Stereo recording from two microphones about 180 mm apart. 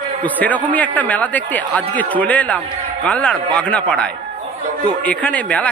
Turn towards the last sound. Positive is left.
turn(degrees=10)  # may be behind; listen again after turning